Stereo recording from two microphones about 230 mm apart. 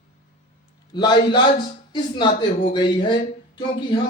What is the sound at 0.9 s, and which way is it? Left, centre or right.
Speech, centre.